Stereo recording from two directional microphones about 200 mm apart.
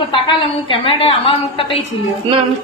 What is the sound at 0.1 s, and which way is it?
A woman's voice, 25° left (ahead or behind).